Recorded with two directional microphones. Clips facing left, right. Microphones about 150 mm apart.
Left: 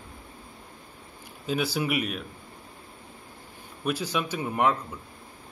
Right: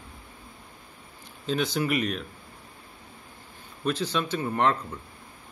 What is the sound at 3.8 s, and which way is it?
Speech, 10° left (ahead or behind).